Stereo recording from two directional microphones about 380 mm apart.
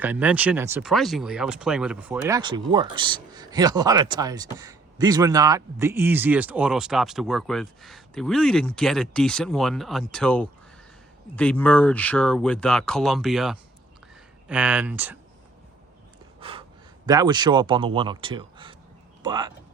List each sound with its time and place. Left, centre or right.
0.0 s speech: centre
16.4 s gasp: centre
17.1 s speech: centre